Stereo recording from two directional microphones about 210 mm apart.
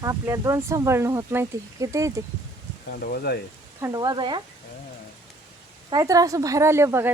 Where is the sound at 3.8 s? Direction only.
15° right (ahead or behind).